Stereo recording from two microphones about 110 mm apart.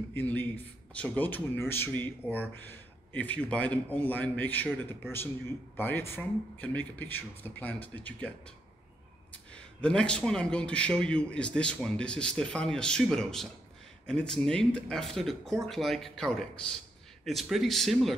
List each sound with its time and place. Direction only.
0.1 s a man's voice: 15° left (ahead or behind)
9.5 s a man's voice: 10° left (ahead or behind)